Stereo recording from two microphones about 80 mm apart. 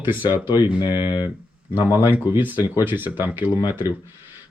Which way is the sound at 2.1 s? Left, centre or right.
Right.